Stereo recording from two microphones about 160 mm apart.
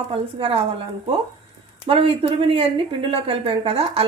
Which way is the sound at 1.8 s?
35° right (ahead or behind).